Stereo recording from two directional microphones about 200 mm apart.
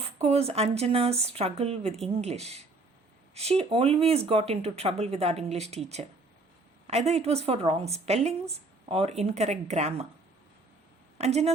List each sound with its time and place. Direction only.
0.2 s speech: 30° right (ahead or behind)
11.2 s speech: 35° right (ahead or behind)